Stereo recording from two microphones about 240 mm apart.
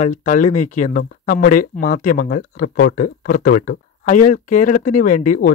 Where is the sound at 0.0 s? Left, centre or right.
Left.